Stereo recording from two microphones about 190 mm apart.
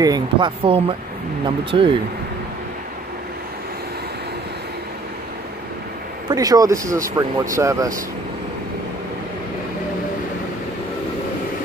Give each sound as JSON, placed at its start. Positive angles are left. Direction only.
{"t": 0.0, "sound": "speech", "side_deg": -25}
{"t": 6.2, "sound": "speech", "side_deg": -20}